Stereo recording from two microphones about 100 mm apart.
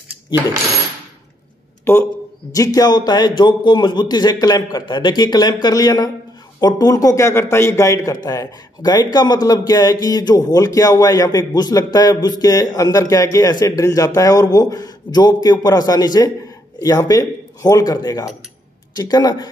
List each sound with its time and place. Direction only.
1.9 s speech: 25° left (ahead or behind)
2.5 s a man's voice: 40° left (ahead or behind)